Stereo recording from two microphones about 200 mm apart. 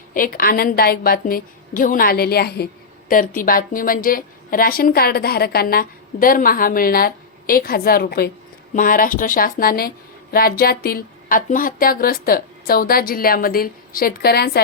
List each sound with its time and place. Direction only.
0.1 s a woman's voice: 45° left (ahead or behind)